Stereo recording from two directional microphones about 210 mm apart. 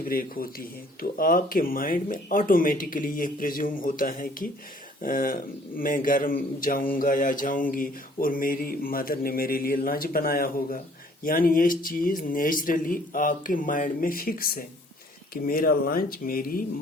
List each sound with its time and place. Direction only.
0.0 s mantra: 45° left (ahead or behind)
1.1 s speech: 40° left (ahead or behind)
6.9 s mantra: 40° left (ahead or behind)
11.2 s speech: 40° left (ahead or behind)
15.3 s mantra: 45° left (ahead or behind)